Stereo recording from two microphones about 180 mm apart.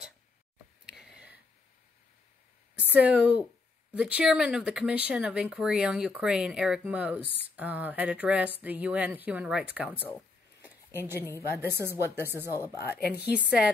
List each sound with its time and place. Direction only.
0.8 s a sound: 5° right (ahead or behind)
2.8 s speech: 10° right (ahead or behind)
11.1 s speech: 15° left (ahead or behind)
11.8 s speech: 15° right (ahead or behind)
12.4 s speech: 15° left (ahead or behind)
13.1 s speech: 5° right (ahead or behind)